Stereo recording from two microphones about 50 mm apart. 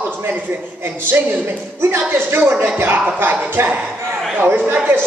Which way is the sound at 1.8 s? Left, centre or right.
Right.